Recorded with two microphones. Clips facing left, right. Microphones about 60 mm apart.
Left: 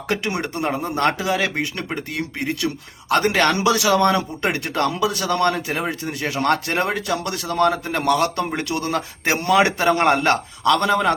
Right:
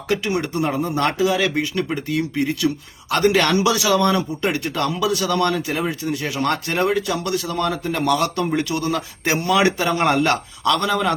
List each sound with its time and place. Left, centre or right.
0.8 s speech: left
2.6 s a man's voice: left
3.1 s speech: left
6.3 s speech: left